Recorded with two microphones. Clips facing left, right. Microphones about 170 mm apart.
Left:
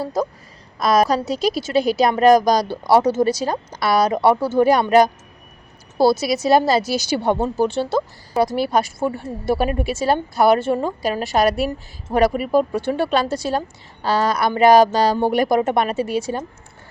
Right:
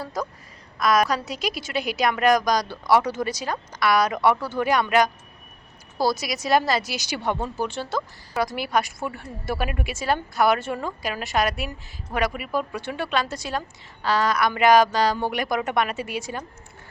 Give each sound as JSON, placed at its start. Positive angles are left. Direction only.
{"t": 0.0, "sound": "a woman's voice", "side_deg": 30}